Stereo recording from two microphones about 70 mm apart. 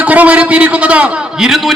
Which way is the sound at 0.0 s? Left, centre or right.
Right.